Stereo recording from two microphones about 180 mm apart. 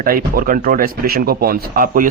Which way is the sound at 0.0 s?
55° right (ahead or behind).